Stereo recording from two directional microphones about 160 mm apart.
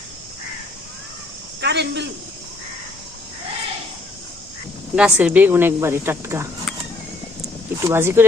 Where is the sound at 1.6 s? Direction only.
90° right.